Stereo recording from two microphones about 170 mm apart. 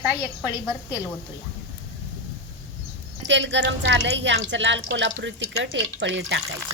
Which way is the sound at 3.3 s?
90° right.